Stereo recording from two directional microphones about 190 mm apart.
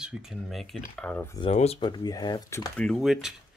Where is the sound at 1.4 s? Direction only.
30° left (ahead or behind).